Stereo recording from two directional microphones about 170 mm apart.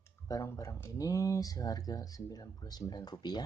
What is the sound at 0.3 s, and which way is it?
Speech, 20° left (ahead or behind).